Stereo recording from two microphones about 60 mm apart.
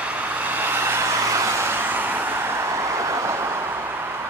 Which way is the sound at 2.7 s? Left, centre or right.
Right.